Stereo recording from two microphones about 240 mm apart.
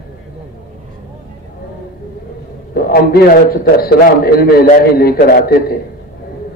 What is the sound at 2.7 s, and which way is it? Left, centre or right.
A man's voice, left.